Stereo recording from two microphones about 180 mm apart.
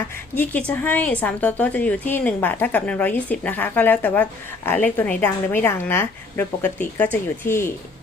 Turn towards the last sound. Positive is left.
turn(degrees=15)  # may be behind; listen again after turning